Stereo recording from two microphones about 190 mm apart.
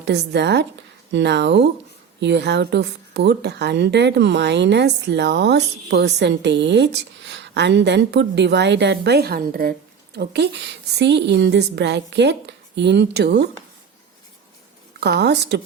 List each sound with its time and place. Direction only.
0.0 s speech: 65° right (ahead or behind)
10.2 s speech: 60° right (ahead or behind)
15.0 s speech: 60° right (ahead or behind)